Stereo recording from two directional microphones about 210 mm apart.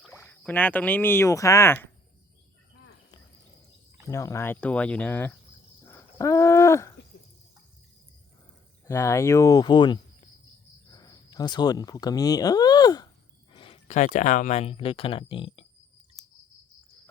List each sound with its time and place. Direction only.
0.1 s speech: 10° left (ahead or behind)
4.1 s speech: 15° left (ahead or behind)
5.8 s a sound: 10° left (ahead or behind)
8.9 s speech: 15° left (ahead or behind)